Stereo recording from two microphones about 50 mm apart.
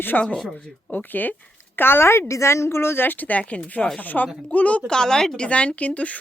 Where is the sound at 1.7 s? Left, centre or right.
Left.